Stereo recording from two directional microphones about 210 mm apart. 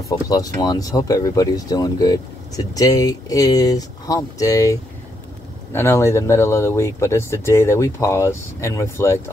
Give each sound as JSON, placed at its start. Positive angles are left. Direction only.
{"t": 0.1, "sound": "speech", "side_deg": 20}